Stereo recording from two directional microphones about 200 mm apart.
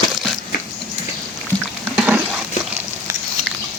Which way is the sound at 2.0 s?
5° right (ahead or behind).